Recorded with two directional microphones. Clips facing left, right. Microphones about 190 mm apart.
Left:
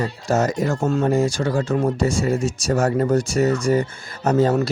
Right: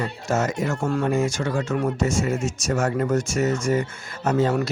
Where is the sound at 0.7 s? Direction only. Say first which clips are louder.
Left 3 dB; 25° left (ahead or behind).